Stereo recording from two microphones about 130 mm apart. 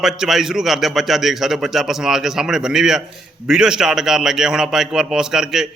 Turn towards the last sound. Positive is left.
turn(degrees=-5)  # may be behind; listen again after turning